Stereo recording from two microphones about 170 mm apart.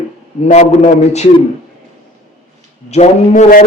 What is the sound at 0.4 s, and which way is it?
Speech, 40° left (ahead or behind).